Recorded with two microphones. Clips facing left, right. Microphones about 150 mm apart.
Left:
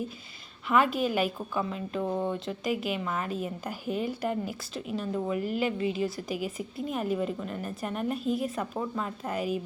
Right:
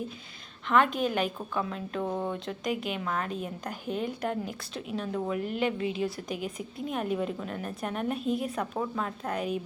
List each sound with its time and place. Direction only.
0.7 s a woman's voice: 5° left (ahead or behind)